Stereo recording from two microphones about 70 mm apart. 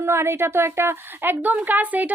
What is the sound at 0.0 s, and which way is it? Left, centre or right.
A woman's voice, right.